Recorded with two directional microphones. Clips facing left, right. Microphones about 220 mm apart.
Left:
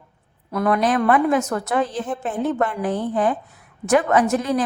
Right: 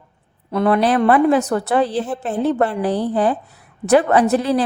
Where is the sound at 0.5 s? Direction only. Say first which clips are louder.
Right 3 dB; 30° right (ahead or behind).